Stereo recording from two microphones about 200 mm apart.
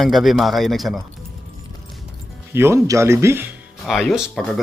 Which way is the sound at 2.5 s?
10° right (ahead or behind).